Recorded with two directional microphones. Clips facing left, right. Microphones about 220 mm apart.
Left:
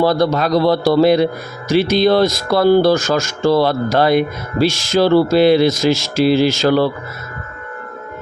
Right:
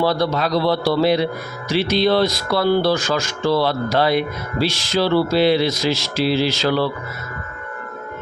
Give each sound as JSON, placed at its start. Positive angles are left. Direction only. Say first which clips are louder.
{"t": 0.0, "sound": "a man's voice", "louder": "left 4 dB", "side_deg": 45}